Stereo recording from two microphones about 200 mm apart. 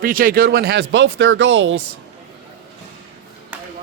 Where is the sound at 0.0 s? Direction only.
45° right (ahead or behind); by 1.7 s 70° right (ahead or behind).